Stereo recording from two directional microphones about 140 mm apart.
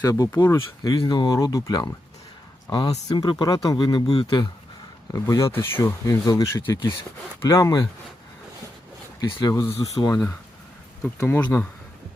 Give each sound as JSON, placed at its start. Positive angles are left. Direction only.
{"t": 0.0, "sound": "speech", "side_deg": 25}
{"t": 5.1, "sound": "speech", "side_deg": 20}
{"t": 9.4, "sound": "speech", "side_deg": 25}
{"t": 11.2, "sound": "speech", "side_deg": 20}